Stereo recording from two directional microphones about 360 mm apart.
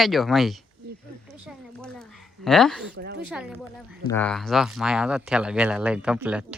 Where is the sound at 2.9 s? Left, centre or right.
Right.